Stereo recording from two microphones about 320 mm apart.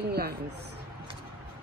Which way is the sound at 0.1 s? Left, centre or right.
Right.